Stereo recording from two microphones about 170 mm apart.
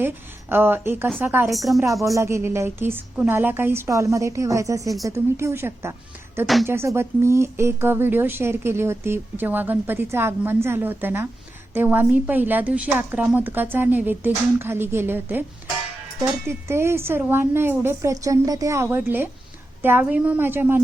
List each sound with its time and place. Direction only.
0.0 s a woman's voice: 10° right (ahead or behind)
1.5 s speech: centre (ahead or behind)
2.1 s speech: 15° right (ahead or behind)
16.5 s speech: 15° right (ahead or behind)